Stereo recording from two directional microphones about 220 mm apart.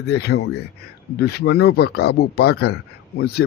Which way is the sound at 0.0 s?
50° left (ahead or behind).